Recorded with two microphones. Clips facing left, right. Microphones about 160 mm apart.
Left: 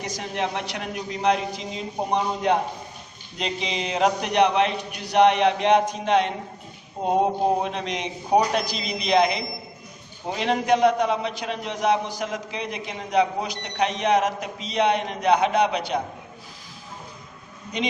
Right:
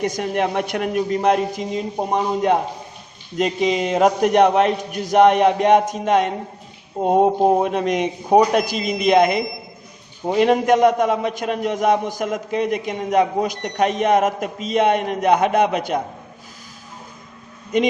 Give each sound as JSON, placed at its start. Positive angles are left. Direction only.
{"t": 0.0, "sound": "a man's voice", "side_deg": -55}
{"t": 17.7, "sound": "a man's voice", "side_deg": -50}